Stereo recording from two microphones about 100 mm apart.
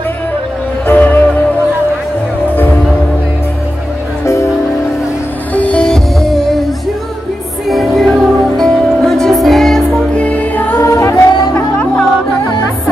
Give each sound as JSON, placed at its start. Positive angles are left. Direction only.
{"t": 0.8, "sound": "music", "side_deg": 15}
{"t": 5.5, "sound": "music", "side_deg": 15}
{"t": 7.6, "sound": "music", "side_deg": 0}